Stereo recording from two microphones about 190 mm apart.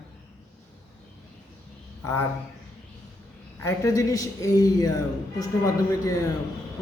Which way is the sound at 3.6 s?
15° left (ahead or behind).